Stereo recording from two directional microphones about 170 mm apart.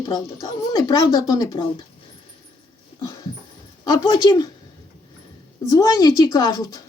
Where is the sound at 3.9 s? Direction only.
25° left (ahead or behind).